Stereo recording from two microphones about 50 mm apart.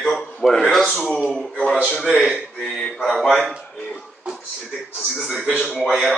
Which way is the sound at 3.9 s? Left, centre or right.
Centre.